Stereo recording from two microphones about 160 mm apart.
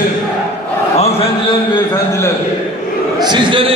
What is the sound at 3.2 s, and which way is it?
Speech, 30° right (ahead or behind).